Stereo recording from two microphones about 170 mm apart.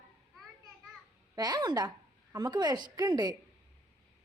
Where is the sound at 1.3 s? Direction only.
25° right (ahead or behind).